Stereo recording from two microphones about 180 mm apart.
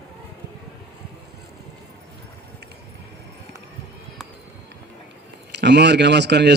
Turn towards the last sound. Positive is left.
turn(degrees=-70)  # may be behind; listen again after turning